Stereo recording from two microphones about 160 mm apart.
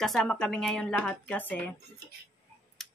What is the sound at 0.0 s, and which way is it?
A woman's voice, centre (ahead or behind).